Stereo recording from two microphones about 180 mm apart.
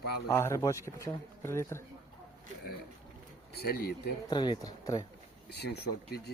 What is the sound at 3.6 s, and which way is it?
Speech, 65° left (ahead or behind).